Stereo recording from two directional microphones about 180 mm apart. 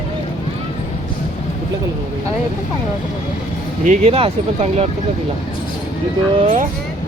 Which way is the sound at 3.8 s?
35° right (ahead or behind).